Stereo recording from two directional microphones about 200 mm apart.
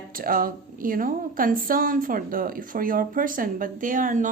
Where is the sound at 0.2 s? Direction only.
45° right (ahead or behind).